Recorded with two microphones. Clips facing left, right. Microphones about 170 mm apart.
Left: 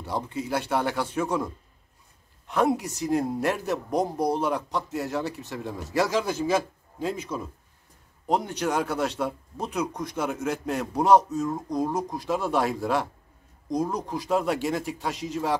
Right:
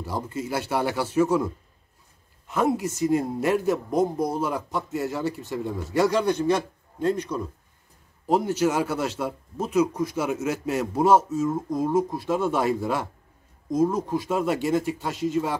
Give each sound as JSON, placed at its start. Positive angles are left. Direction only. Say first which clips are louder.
{"t": 0.0, "sound": "a man's voice", "louder": "even", "side_deg": 0}